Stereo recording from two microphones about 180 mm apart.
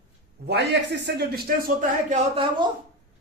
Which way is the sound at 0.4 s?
65° right (ahead or behind).